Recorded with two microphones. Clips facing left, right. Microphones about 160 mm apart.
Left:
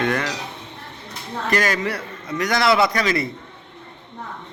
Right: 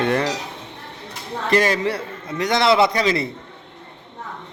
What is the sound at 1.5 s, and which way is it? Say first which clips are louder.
A man's voice: right 3 dB; 25° right (ahead or behind).